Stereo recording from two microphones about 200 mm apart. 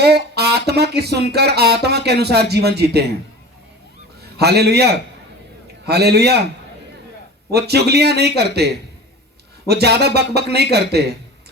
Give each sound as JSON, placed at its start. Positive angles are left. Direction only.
{"t": 0.0, "sound": "speech", "side_deg": -55}
{"t": 4.2, "sound": "a man's voice", "side_deg": -55}
{"t": 7.5, "sound": "speech", "side_deg": -55}
{"t": 9.6, "sound": "speech", "side_deg": -55}